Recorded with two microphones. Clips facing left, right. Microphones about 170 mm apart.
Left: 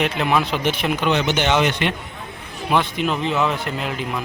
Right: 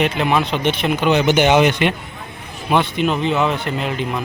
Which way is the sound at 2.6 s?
Centre (ahead or behind).